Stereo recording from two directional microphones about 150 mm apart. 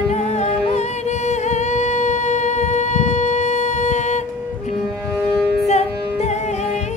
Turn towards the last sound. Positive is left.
turn(degrees=50)  # may be behind; listen again after turning